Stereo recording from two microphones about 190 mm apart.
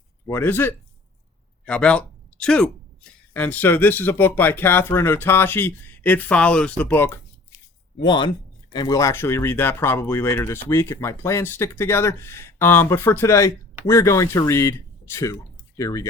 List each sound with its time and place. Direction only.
0.3 s speech: 10° left (ahead or behind)
8.0 s speech: 25° left (ahead or behind)